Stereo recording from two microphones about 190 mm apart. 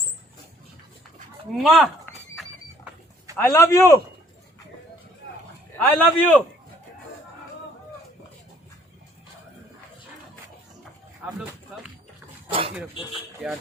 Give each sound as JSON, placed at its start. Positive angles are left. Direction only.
{"t": 1.5, "sound": "speech", "side_deg": 0}
{"t": 3.3, "sound": "a man's voice", "side_deg": 15}
{"t": 5.8, "sound": "a man's voice", "side_deg": 10}
{"t": 11.2, "sound": "speech", "side_deg": -10}
{"t": 12.5, "sound": "a sound", "side_deg": -30}
{"t": 13.4, "sound": "speech", "side_deg": -5}